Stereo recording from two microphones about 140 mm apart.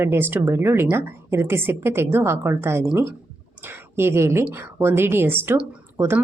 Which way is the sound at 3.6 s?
15° right (ahead or behind).